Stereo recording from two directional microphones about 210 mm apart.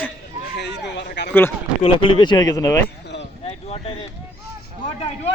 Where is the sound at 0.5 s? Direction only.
55° left (ahead or behind).